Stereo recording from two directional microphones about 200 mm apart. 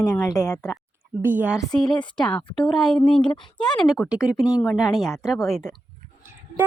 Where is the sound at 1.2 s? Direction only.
10° right (ahead or behind).